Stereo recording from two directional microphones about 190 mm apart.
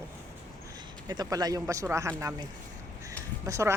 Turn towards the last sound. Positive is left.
turn(degrees=-15)  # may be behind; listen again after turning